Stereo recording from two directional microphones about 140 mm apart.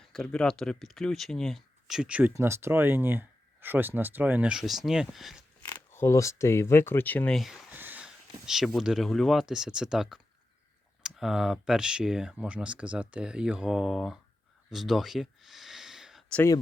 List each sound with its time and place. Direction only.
0.0 s speech: 5° left (ahead or behind)
5.7 s speech: 15° left (ahead or behind)
7.3 s speech: centre (ahead or behind)
7.8 s a sound: 10° right (ahead or behind)
8.4 s speech: centre (ahead or behind)
14.7 s a sound: centre (ahead or behind)